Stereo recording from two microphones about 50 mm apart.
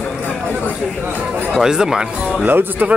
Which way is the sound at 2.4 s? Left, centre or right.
Right.